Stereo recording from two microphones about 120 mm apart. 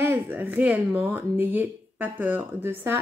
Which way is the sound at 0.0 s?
20° right (ahead or behind).